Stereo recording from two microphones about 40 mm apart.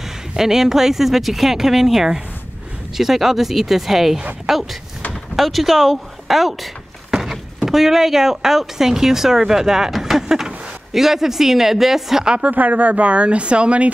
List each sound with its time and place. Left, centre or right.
0.4 s speech: centre
12.4 s speech: right